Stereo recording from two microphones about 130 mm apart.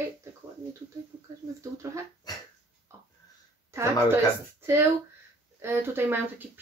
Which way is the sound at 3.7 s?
20° right (ahead or behind).